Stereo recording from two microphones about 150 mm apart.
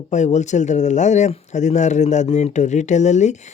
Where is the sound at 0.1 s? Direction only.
50° left (ahead or behind).